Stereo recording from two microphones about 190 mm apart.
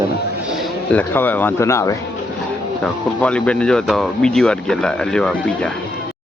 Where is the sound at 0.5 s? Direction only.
Centre (ahead or behind).